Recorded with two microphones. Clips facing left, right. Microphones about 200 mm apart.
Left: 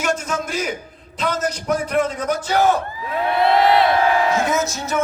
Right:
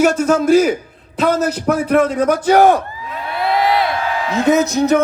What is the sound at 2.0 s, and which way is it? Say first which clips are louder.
Speech: right 5 dB; 70° right (ahead or behind).